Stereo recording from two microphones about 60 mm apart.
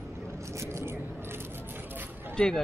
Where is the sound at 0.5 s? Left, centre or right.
Right.